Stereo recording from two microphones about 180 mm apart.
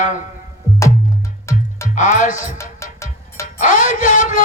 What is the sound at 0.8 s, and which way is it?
Music, 15° left (ahead or behind).